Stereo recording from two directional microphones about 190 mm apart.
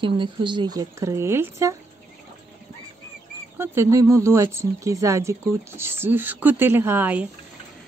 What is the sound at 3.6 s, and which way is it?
Speech, 15° right (ahead or behind).